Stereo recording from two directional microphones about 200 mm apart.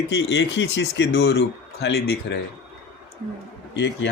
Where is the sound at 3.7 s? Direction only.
60° left (ahead or behind).